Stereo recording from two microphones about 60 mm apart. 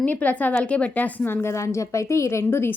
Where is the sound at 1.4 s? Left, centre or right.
Left.